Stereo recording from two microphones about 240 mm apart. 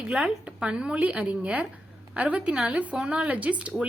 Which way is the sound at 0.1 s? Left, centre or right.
Centre.